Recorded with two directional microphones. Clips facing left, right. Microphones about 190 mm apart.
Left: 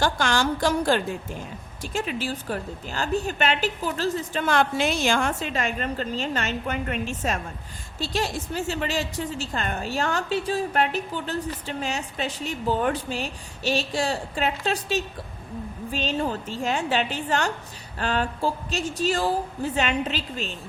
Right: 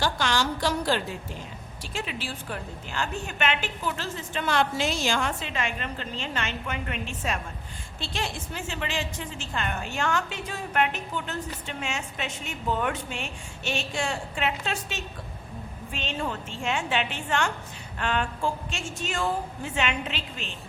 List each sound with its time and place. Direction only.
0.0 s a woman's voice: 50° left (ahead or behind)